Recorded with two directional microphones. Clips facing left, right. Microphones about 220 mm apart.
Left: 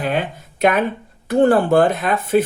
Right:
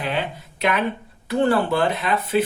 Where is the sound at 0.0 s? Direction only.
50° left (ahead or behind).